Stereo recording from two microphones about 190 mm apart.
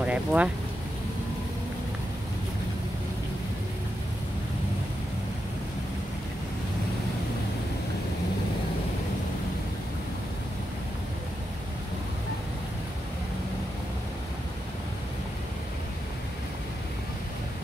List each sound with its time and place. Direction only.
0.0 s vehicle: 5° right (ahead or behind)